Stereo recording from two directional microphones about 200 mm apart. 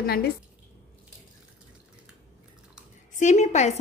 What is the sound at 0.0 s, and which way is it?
Speech, 50° left (ahead or behind).